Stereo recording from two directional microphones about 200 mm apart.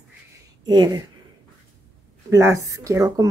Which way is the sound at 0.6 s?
20° right (ahead or behind).